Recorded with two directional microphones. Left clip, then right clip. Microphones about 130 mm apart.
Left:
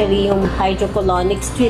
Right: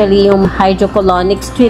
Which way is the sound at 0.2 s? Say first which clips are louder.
Right 7 dB; 50° right (ahead or behind).